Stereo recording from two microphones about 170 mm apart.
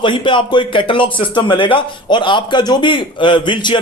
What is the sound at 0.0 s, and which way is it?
Speech, 30° left (ahead or behind).